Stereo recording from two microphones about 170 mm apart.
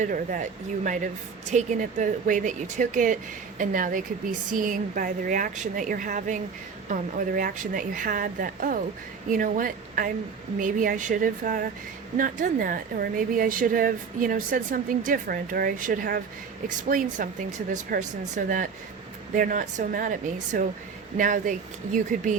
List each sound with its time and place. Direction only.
0.0 s a woman's voice: 50° right (ahead or behind)
16.6 s a woman's voice: 50° right (ahead or behind)